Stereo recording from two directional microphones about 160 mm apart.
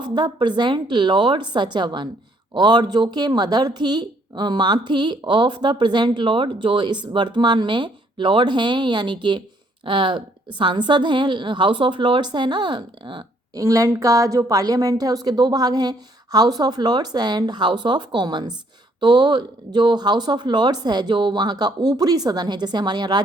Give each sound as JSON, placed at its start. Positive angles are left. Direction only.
{"t": 0.0, "sound": "a woman's voice", "side_deg": -30}